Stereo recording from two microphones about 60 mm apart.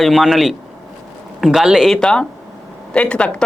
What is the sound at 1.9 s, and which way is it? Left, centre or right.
Speech, centre.